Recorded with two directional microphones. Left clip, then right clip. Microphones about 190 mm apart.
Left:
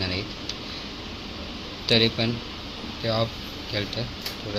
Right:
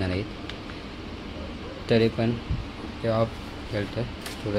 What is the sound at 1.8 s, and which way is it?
Speech, 15° right (ahead or behind).